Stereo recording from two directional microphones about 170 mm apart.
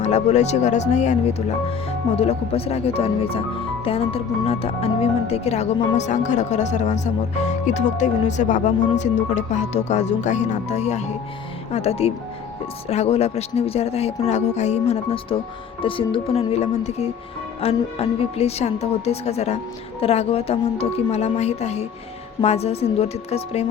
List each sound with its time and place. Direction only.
0.0 s speech: 40° left (ahead or behind)